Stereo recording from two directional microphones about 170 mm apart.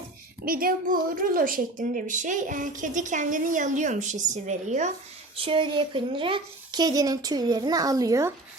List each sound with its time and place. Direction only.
0.4 s a woman's voice: 60° right (ahead or behind)
5.5 s speech: 30° right (ahead or behind)